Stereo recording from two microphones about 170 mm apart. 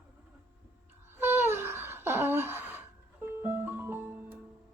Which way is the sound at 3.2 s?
15° right (ahead or behind).